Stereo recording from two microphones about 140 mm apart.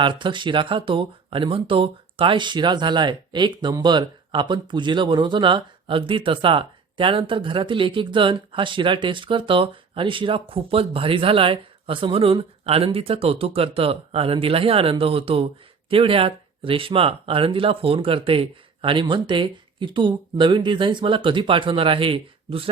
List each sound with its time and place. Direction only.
0.0 s speech: 35° right (ahead or behind)